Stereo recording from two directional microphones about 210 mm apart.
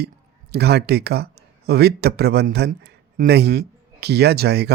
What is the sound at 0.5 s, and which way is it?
Speech, 50° right (ahead or behind).